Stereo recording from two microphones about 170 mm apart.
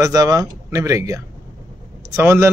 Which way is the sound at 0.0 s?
20° right (ahead or behind).